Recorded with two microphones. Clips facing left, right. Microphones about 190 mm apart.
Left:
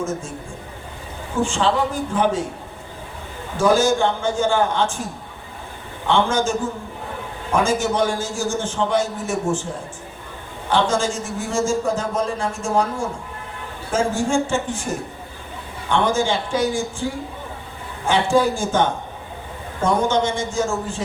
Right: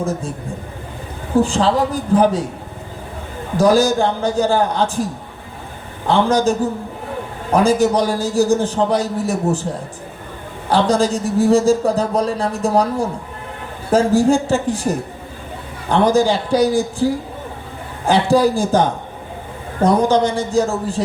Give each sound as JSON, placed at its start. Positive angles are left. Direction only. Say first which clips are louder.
{"t": 0.0, "sound": "a man's voice", "louder": "right 4 dB", "side_deg": -35}
{"t": 1.4, "sound": "a man's voice", "louder": "right 4 dB", "side_deg": -35}
{"t": 3.6, "sound": "a man's voice", "louder": "right 3 dB", "side_deg": -35}
{"t": 6.1, "sound": "a man's voice", "louder": "right 4 dB", "side_deg": -35}
{"t": 10.7, "sound": "a man's voice", "louder": "right 4 dB", "side_deg": -35}